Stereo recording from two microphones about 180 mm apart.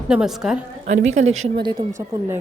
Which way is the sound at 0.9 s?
40° right (ahead or behind).